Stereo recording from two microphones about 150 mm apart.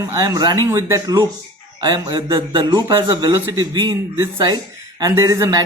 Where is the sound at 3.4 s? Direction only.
15° right (ahead or behind).